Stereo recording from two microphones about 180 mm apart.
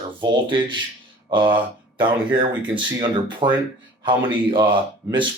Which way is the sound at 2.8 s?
25° right (ahead or behind).